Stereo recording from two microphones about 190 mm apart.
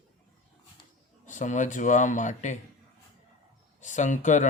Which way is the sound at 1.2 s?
40° left (ahead or behind).